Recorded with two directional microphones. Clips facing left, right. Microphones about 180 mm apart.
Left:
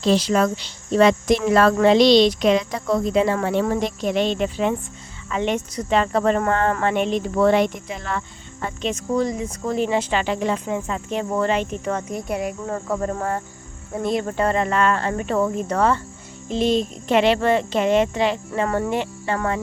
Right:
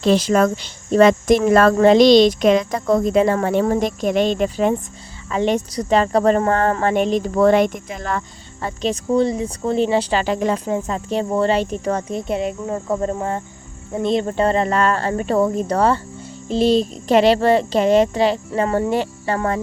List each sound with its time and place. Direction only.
0.0 s speech: 50° right (ahead or behind)
12.1 s speech: 25° right (ahead or behind)